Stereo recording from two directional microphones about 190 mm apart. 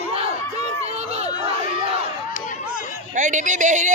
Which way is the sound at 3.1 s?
40° right (ahead or behind).